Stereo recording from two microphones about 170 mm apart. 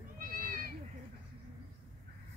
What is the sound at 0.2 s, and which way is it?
Goat, 55° right (ahead or behind).